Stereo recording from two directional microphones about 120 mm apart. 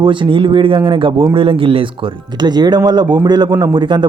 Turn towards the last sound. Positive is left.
turn(degrees=-40)  # may be behind; listen again after turning